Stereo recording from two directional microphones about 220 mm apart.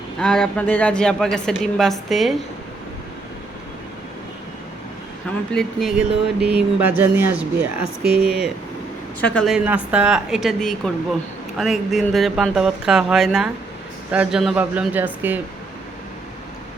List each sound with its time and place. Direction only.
0.2 s a woman's voice: 5° left (ahead or behind)
5.5 s a woman's voice: centre (ahead or behind)
8.0 s speech: 45° right (ahead or behind)
9.2 s a woman's voice: 5° left (ahead or behind)
9.6 s a woman's voice: 5° right (ahead or behind)